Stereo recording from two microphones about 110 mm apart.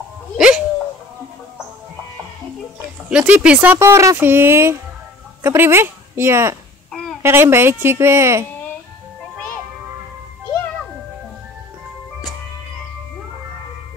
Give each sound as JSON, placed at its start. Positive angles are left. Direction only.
{"t": 0.4, "sound": "dog", "side_deg": -10}
{"t": 3.1, "sound": "speech", "side_deg": -10}
{"t": 3.7, "sound": "a woman's voice", "side_deg": -25}
{"t": 6.9, "sound": "a sound", "side_deg": 5}
{"t": 7.2, "sound": "a woman's voice", "side_deg": -20}